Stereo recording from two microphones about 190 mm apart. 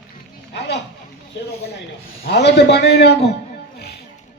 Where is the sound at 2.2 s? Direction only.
60° left (ahead or behind).